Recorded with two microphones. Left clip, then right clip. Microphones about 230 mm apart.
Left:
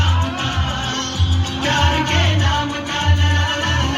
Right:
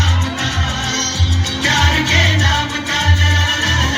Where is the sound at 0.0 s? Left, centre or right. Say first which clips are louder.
Right 2 dB; right.